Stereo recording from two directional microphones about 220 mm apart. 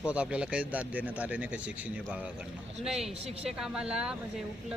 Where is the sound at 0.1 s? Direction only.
5° right (ahead or behind).